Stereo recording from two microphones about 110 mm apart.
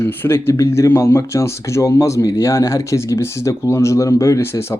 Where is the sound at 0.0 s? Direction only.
20° left (ahead or behind).